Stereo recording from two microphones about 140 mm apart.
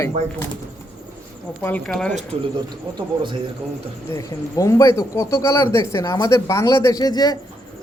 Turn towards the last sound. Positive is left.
turn(degrees=30)  # may be behind; listen again after turning